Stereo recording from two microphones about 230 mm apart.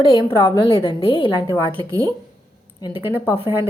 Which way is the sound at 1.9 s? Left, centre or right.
Centre.